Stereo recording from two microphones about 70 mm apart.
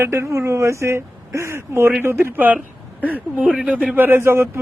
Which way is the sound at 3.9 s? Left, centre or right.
Right.